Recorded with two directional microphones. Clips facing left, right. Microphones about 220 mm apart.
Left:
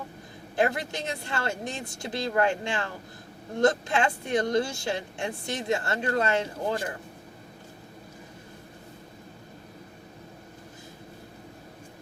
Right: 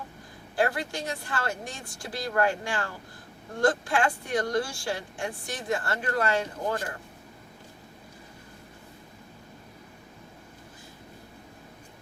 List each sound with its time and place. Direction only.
0.5 s speech: 20° left (ahead or behind)